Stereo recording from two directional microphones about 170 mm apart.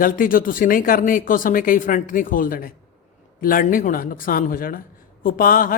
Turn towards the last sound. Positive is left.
turn(degrees=55)  # may be behind; listen again after turning